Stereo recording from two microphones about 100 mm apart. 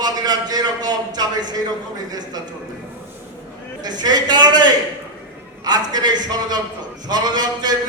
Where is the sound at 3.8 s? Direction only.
45° right (ahead or behind).